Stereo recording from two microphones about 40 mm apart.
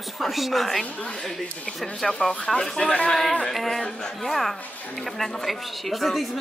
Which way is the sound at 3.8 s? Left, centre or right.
Centre.